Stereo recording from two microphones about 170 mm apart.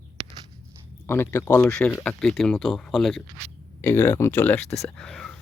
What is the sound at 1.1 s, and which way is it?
Speech, 15° left (ahead or behind).